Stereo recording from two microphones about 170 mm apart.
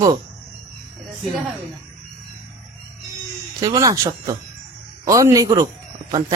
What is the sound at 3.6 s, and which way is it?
A man's voice, 20° right (ahead or behind).